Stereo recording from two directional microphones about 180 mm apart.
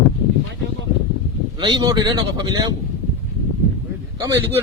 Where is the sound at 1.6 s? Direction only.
25° right (ahead or behind).